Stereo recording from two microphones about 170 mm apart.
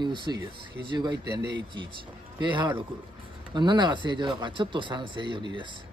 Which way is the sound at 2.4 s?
30° right (ahead or behind).